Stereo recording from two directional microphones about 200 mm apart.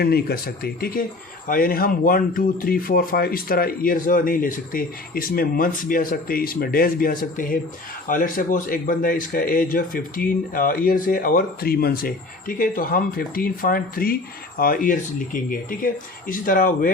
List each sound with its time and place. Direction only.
0.0 s speech: 50° left (ahead or behind)